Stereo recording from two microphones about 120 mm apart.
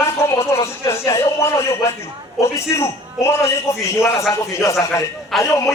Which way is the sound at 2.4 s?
20° left (ahead or behind).